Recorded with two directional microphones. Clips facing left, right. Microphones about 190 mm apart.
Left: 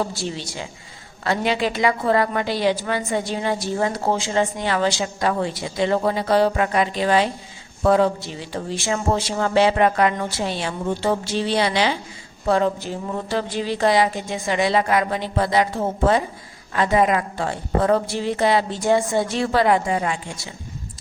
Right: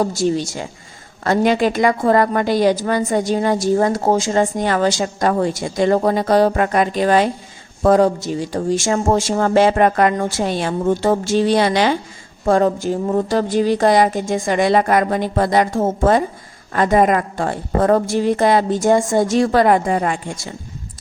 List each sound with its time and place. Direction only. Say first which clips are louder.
0.0 s a woman's voice: right 8 dB; 45° right (ahead or behind)